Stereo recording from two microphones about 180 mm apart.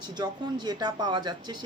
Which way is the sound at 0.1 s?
25° right (ahead or behind).